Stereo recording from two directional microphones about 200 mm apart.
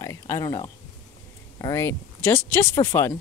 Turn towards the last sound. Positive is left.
turn(degrees=15)  # may be behind; listen again after turning